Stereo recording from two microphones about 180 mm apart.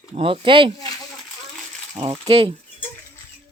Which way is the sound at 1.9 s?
25° right (ahead or behind).